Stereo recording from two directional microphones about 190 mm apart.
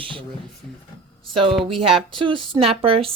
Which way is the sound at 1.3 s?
25° right (ahead or behind).